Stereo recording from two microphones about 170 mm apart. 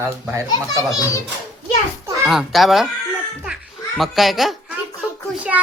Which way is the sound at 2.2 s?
Centre (ahead or behind).